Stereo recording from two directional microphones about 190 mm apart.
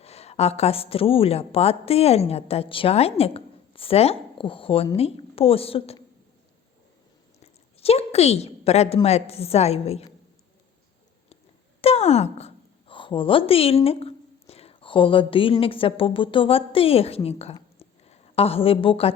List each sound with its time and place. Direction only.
0.0 s a woman's voice: 35° left (ahead or behind)
7.3 s a sound: 35° left (ahead or behind)
9.0 s a woman's voice: 35° left (ahead or behind)
11.8 s speech: 35° left (ahead or behind)